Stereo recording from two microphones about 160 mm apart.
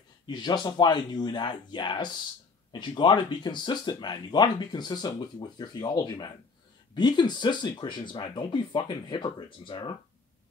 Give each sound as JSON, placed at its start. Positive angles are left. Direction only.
{"t": 0.3, "sound": "speech", "side_deg": 25}